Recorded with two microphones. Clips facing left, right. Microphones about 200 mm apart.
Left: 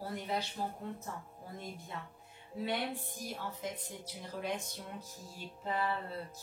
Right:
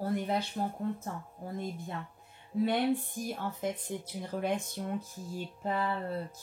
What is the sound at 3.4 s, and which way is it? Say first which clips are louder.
Speech: right 5 dB; 50° right (ahead or behind).